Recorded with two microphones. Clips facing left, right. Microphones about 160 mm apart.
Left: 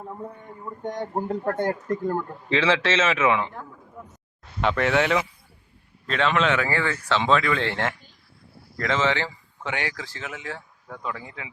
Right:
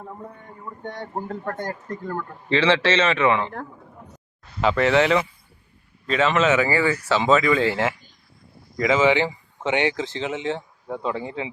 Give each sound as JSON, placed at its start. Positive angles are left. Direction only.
{"t": 0.0, "sound": "a man's voice", "side_deg": 10}
{"t": 1.1, "sound": "speech", "side_deg": 25}
{"t": 2.5, "sound": "speech", "side_deg": 0}
{"t": 4.6, "sound": "speech", "side_deg": 0}